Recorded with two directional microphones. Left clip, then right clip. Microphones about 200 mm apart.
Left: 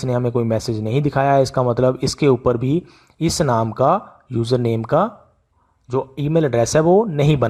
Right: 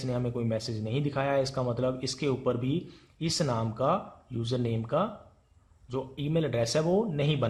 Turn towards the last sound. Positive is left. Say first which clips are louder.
# left 12 dB
turn(degrees=50)  # may be behind; listen again after turning